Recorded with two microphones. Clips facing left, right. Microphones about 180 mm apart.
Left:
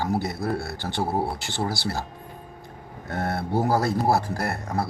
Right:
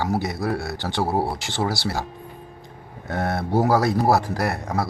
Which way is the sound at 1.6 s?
85° right.